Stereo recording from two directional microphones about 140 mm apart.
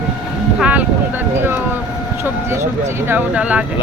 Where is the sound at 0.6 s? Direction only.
10° right (ahead or behind).